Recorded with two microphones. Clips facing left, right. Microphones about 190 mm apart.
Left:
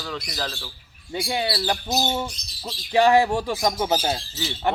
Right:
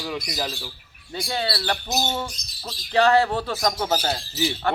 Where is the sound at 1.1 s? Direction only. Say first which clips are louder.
Left 2 dB; 15° left (ahead or behind).